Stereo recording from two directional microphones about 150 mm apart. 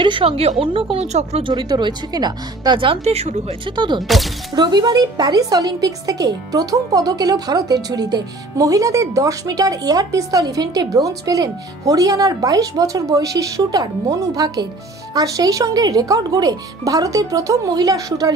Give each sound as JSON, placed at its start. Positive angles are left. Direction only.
{"t": 0.0, "sound": "speech", "side_deg": -35}
{"t": 1.4, "sound": "speech", "side_deg": -30}
{"t": 3.6, "sound": "speech", "side_deg": -30}